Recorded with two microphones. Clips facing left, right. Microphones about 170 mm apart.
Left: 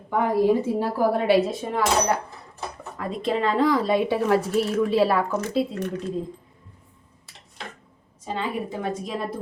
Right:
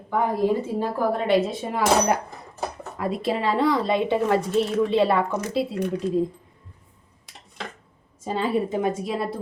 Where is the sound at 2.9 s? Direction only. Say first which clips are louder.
Even; 5° right (ahead or behind).